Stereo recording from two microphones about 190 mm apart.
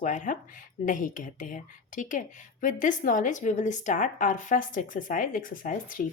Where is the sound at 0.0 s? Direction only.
40° left (ahead or behind).